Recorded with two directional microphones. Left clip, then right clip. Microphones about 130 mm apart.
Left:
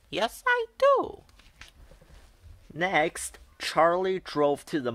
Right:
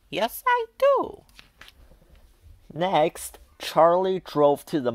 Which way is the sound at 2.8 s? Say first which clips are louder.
Right 4 dB; 35° right (ahead or behind).